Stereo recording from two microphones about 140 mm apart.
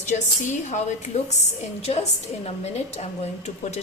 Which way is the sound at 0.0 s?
55° left (ahead or behind).